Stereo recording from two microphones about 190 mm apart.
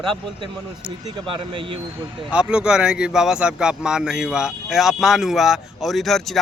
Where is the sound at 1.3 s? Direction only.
25° right (ahead or behind).